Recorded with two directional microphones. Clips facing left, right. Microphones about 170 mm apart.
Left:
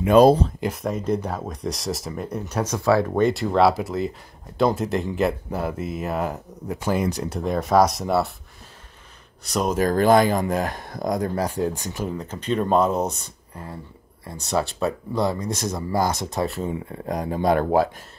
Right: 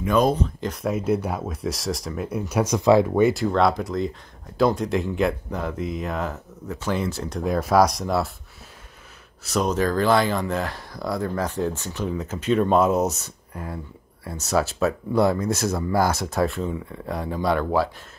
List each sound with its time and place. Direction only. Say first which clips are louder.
0.1 s speech: left 6 dB; 30° left (ahead or behind)
0.8 s speech: right 3 dB; 5° right (ahead or behind)
3.2 s speech: even; 5° right (ahead or behind); by 7.3 s 15° left (ahead or behind)
7.3 s speech: even; centre (ahead or behind)
9.4 s speech: even; centre (ahead or behind)
9.8 s speech: left 6 dB; 45° left (ahead or behind)
11.3 s speech: left 1 dB; 10° left (ahead or behind)
12.1 s speech: right 4 dB; 5° right (ahead or behind)
15.9 s speech: right 1 dB; 20° left (ahead or behind)
16.4 s speech: even; centre (ahead or behind)
16.9 s speech: left 2 dB; 40° left (ahead or behind)